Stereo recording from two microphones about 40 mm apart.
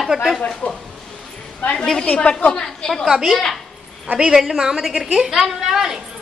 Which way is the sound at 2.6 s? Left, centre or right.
Centre.